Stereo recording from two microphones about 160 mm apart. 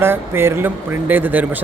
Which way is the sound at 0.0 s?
15° right (ahead or behind).